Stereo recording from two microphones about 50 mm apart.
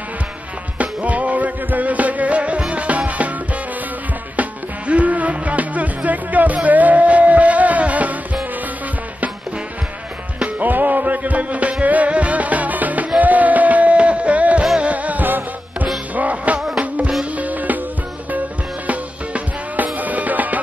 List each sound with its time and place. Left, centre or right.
0.7 s music: right
4.4 s music: right
10.4 s music: right
16.5 s music: centre
16.8 s music: right
18.9 s music: right